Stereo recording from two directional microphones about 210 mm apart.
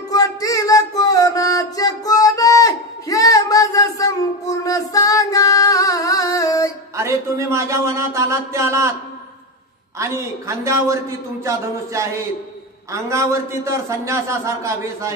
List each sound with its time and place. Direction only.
0.1 s music: 15° left (ahead or behind)
7.0 s a sound: 15° right (ahead or behind)
9.9 s a man's voice: 15° right (ahead or behind)